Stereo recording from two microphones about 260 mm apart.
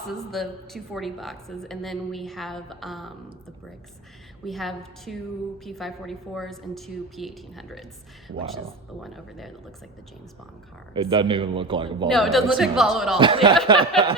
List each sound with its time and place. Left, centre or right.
0.3 s a woman's voice: centre
4.4 s a woman's voice: centre
9.0 s a woman's voice: centre
10.9 s speech: centre
12.0 s a woman's voice: centre
13.1 s speech: centre
13.7 s a sound: centre